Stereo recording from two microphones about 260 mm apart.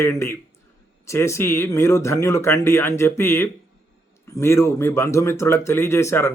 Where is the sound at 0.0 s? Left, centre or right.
Centre.